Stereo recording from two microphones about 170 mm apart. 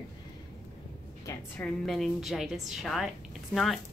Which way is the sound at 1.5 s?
5° left (ahead or behind).